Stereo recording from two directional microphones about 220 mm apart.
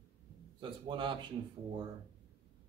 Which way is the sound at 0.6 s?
20° right (ahead or behind).